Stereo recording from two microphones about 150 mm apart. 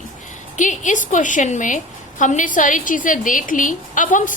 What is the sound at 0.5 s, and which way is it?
A woman's voice, 55° left (ahead or behind).